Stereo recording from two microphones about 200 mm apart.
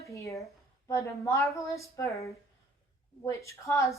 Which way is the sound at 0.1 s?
15° left (ahead or behind).